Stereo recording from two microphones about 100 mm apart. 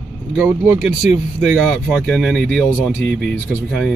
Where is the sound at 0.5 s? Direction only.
15° right (ahead or behind).